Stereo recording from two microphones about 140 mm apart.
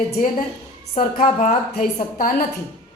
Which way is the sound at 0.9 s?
55° left (ahead or behind).